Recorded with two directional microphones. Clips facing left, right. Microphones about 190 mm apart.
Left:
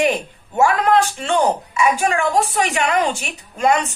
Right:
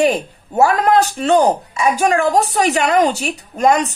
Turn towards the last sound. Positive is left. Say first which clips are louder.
# right 3 dB
turn(degrees=-40)  # may be behind; listen again after turning